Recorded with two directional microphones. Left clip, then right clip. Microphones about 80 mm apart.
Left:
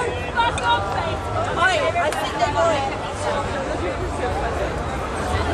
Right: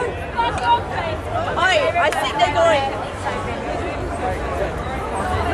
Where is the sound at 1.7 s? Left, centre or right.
Right.